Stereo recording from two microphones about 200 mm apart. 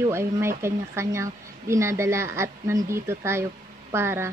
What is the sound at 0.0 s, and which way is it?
Speech, 15° right (ahead or behind).